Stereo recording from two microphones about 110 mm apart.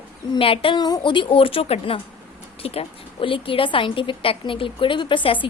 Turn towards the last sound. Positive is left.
turn(degrees=50)  # may be behind; listen again after turning